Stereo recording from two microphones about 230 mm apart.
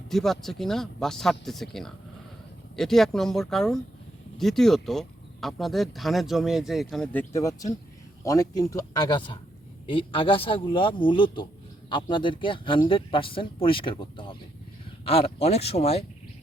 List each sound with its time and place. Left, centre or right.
0.1 s speech: centre; by 16.0 s left